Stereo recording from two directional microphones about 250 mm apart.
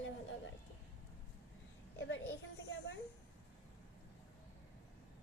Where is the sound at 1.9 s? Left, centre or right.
Left.